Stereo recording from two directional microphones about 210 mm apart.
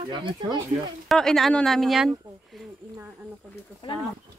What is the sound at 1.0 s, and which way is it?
Speech, centre (ahead or behind).